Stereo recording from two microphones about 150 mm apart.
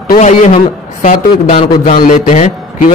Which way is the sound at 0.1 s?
50° left (ahead or behind).